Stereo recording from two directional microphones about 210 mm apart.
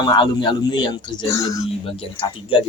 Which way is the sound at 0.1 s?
20° left (ahead or behind).